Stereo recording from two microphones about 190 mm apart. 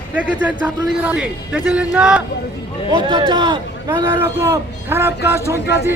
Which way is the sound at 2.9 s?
25° right (ahead or behind).